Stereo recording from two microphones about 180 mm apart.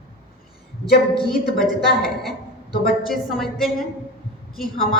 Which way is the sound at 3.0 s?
Centre (ahead or behind).